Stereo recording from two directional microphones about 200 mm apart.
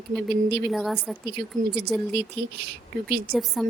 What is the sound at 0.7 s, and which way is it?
Speech, centre (ahead or behind).